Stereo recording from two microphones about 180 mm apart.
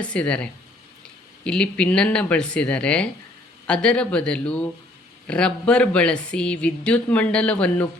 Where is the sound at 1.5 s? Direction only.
5° left (ahead or behind).